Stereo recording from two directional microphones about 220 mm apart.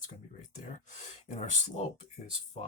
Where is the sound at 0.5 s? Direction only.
35° left (ahead or behind).